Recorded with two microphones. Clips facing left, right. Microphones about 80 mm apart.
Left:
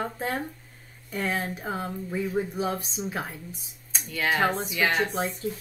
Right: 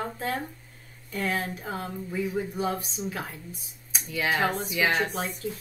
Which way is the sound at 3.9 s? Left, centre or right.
Centre.